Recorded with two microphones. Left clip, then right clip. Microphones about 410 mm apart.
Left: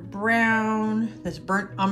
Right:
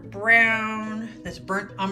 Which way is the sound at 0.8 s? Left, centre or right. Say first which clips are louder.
Left 5 dB; centre.